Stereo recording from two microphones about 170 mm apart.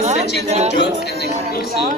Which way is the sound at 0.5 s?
40° right (ahead or behind).